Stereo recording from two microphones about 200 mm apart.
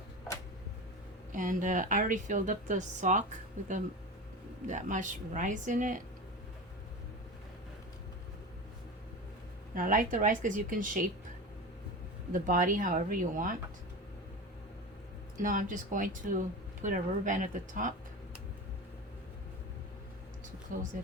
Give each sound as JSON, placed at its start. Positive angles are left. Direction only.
{"t": 1.3, "sound": "speech", "side_deg": -40}
{"t": 4.6, "sound": "speech", "side_deg": -40}
{"t": 9.7, "sound": "a woman's voice", "side_deg": -40}
{"t": 12.3, "sound": "a woman's voice", "side_deg": -40}
{"t": 15.4, "sound": "speech", "side_deg": -40}
{"t": 20.7, "sound": "speech", "side_deg": -40}